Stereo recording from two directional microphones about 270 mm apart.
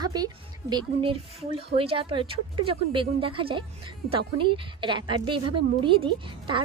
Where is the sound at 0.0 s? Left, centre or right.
Centre.